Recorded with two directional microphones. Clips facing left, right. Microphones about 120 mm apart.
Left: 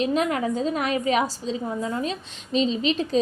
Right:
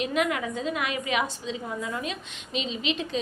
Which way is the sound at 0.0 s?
35° left (ahead or behind).